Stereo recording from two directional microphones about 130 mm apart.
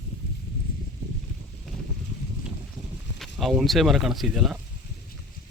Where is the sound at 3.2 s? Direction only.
Centre (ahead or behind).